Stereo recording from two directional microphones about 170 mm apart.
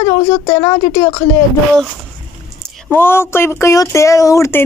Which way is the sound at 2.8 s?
15° left (ahead or behind).